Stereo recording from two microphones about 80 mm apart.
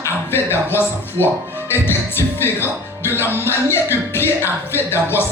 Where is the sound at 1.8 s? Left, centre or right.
Left.